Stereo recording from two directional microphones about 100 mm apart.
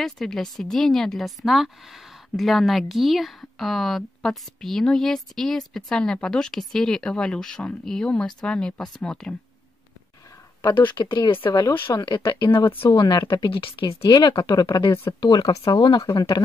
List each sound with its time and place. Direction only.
0.0 s speech: 5° left (ahead or behind)
10.6 s speech: 50° left (ahead or behind)
14.0 s speech: 45° left (ahead or behind)